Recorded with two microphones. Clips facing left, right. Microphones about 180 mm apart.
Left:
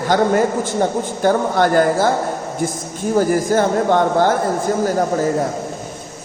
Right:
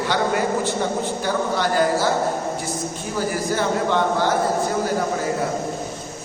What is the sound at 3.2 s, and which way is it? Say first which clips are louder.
A man's voice: left 8 dB; 50° left (ahead or behind).